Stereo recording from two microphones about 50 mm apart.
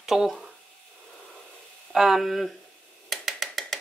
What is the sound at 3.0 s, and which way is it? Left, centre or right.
Mechanisms, centre.